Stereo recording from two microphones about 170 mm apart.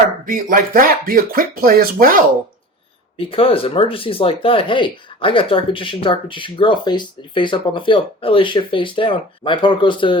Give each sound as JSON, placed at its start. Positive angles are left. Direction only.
{"t": 0.3, "sound": "speech", "side_deg": -55}
{"t": 3.2, "sound": "speech", "side_deg": 35}